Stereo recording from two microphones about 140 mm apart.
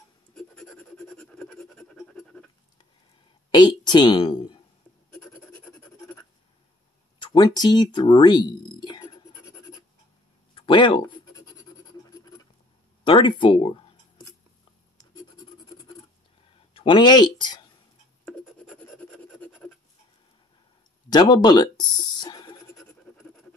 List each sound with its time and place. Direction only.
0.3 s scratch: 5° left (ahead or behind)
3.5 s a woman's voice: 30° left (ahead or behind)
7.2 s speech: 30° left (ahead or behind)
10.5 s scratch: 35° left (ahead or behind)
13.0 s speech: 40° left (ahead or behind)
16.7 s speech: 40° left (ahead or behind)
18.8 s a sound: 10° left (ahead or behind)
21.1 s speech: 30° left (ahead or behind)